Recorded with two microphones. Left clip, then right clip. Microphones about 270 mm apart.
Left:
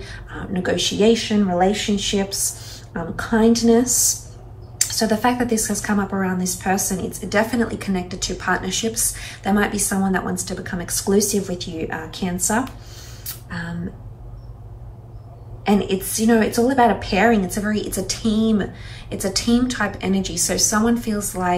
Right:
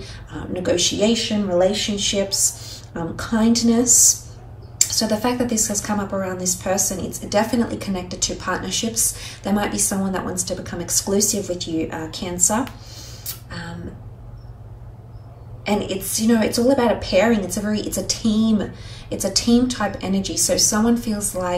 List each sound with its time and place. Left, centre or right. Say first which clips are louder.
0.0 s a sound: left 1 dB; centre
2.0 s a woman's voice: right 2 dB; centre
15.6 s a woman's voice: left 2 dB; centre